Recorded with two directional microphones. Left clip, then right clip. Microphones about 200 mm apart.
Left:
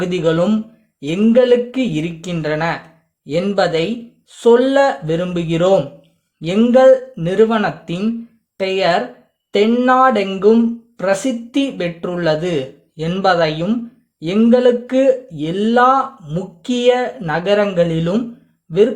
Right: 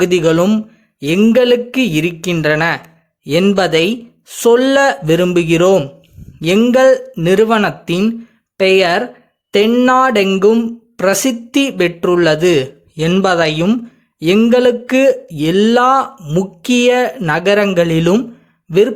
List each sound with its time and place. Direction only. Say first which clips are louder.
0.0 s speech: right 4 dB; 25° right (ahead or behind)